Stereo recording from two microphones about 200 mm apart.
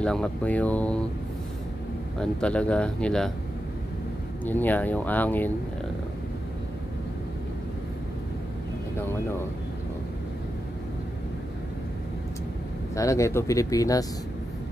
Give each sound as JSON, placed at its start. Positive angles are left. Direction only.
{"t": 0.0, "sound": "speech", "side_deg": 5}
{"t": 2.1, "sound": "speech", "side_deg": 5}
{"t": 4.5, "sound": "speech", "side_deg": 10}
{"t": 12.9, "sound": "speech", "side_deg": 15}